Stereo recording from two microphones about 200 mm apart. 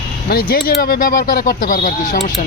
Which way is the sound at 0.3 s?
50° left (ahead or behind).